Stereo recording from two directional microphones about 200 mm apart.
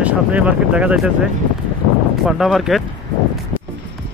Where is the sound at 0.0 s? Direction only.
5° right (ahead or behind).